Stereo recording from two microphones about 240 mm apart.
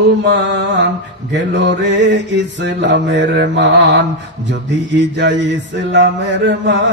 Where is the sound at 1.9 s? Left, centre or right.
Right.